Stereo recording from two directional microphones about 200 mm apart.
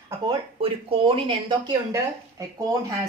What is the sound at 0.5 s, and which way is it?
Speech, 25° right (ahead or behind).